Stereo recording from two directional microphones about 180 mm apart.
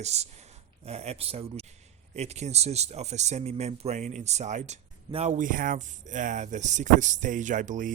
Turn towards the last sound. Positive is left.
turn(degrees=-45)  # may be behind; listen again after turning